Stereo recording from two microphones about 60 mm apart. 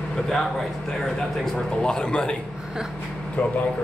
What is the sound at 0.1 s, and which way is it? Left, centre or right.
Speech, centre.